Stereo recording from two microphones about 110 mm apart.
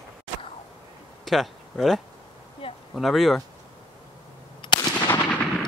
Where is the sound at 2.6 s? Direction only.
50° left (ahead or behind).